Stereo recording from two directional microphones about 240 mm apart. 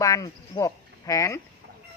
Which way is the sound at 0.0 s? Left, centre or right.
Centre.